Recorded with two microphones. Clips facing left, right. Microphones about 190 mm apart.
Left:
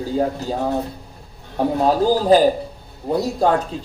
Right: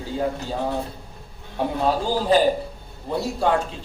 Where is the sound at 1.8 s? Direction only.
40° left (ahead or behind).